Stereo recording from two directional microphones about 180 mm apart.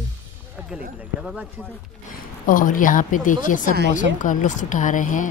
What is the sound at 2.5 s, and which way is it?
Speech, 50° left (ahead or behind).